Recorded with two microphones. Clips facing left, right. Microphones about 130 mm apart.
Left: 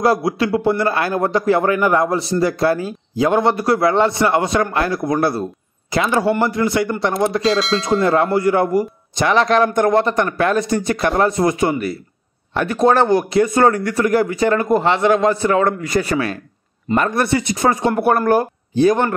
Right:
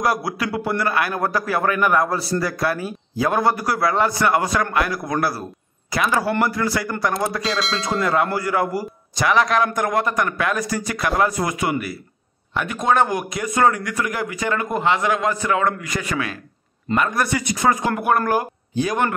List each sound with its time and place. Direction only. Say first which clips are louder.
0.0 s a man's voice: left 6 dB; 25° left (ahead or behind)
7.5 s speech: left 6 dB; centre (ahead or behind)
8.0 s a man's voice: left 4 dB; 30° left (ahead or behind)